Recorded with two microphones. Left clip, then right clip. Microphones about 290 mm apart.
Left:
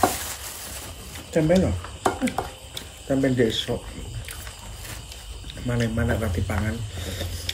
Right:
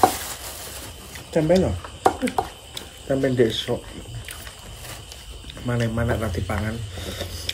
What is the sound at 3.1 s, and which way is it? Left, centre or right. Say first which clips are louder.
Speech: right 2 dB; centre.